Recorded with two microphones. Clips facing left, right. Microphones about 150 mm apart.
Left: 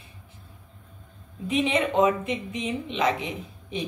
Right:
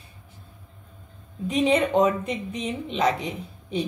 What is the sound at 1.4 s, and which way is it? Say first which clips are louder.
Speech: right 3 dB; 40° right (ahead or behind).